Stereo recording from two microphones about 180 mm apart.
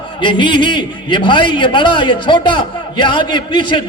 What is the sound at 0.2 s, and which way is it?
A man's voice, 25° left (ahead or behind).